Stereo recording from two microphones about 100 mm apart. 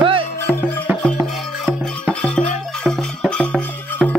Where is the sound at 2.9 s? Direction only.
10° left (ahead or behind).